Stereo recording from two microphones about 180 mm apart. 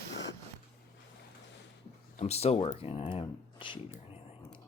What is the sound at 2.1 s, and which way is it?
Speech, 35° left (ahead or behind).